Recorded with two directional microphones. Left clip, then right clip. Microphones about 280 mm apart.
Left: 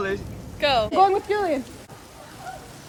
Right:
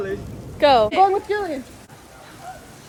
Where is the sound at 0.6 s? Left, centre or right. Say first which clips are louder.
Right 6 dB; right.